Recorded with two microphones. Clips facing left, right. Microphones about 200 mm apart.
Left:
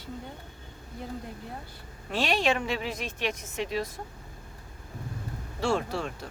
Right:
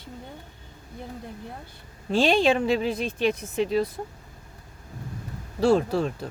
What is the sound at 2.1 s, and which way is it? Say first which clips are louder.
Speech: right 6 dB; 30° right (ahead or behind).